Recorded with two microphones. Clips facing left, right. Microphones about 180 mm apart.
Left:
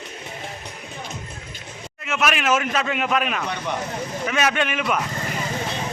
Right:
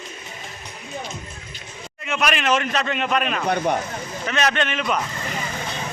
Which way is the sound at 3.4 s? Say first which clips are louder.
Right 6 dB; 50° right (ahead or behind).